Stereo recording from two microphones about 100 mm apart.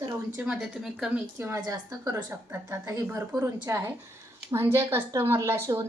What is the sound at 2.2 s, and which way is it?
Speech, 20° right (ahead or behind).